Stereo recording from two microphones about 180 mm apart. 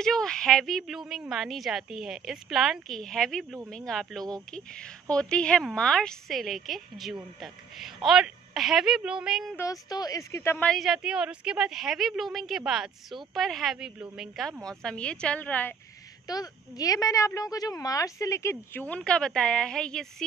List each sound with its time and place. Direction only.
0.0 s a woman's voice: 5° left (ahead or behind)
9.6 s a woman's voice: 20° left (ahead or behind)
16.3 s a woman's voice: 20° left (ahead or behind); by 20.2 s 5° left (ahead or behind)